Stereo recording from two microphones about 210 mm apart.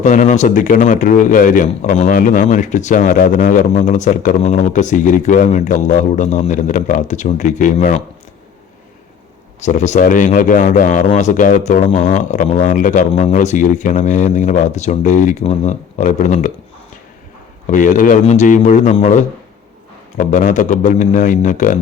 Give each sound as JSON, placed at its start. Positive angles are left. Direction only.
{"t": 0.0, "sound": "a man's voice", "side_deg": 35}
{"t": 9.6, "sound": "a man's voice", "side_deg": 35}
{"t": 17.7, "sound": "a man's voice", "side_deg": 35}